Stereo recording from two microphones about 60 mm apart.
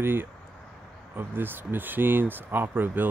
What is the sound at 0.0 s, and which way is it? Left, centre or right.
Speech, right.